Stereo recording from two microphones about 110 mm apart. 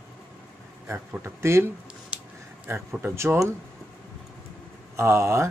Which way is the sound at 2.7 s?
25° right (ahead or behind).